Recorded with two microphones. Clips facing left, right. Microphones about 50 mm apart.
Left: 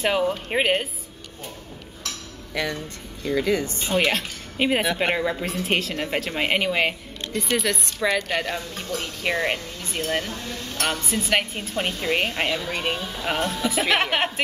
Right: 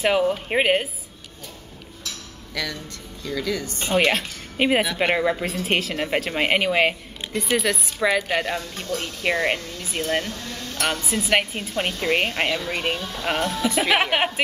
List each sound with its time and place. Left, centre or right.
0.0 s a woman's voice: centre
2.5 s speech: left
4.0 s a woman's voice: centre